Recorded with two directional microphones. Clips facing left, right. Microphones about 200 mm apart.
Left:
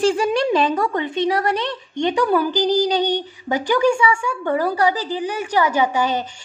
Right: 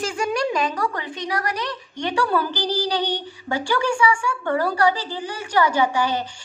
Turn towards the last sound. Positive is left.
turn(degrees=20)  # may be behind; listen again after turning